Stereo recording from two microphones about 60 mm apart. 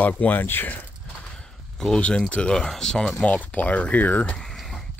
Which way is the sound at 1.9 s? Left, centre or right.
Centre.